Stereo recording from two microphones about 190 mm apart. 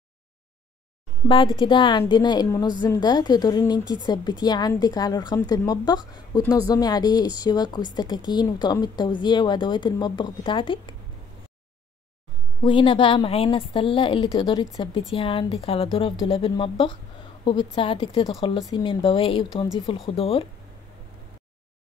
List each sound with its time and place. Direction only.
1.6 s a woman's voice: 25° left (ahead or behind)
12.6 s a woman's voice: 25° left (ahead or behind)